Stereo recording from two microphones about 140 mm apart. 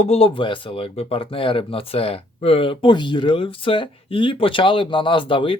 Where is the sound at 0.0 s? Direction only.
45° left (ahead or behind).